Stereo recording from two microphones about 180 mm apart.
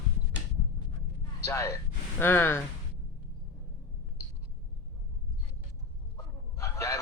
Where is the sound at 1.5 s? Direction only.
15° left (ahead or behind).